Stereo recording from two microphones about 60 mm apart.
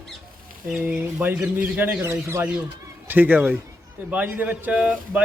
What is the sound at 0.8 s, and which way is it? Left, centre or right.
Speech, right.